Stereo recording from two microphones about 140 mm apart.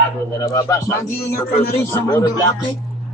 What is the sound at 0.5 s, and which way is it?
Speech, 25° left (ahead or behind).